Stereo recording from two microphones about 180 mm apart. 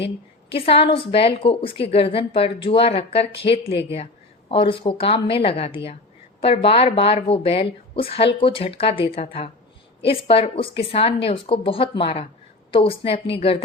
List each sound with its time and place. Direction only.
0.5 s a woman's voice: 30° left (ahead or behind)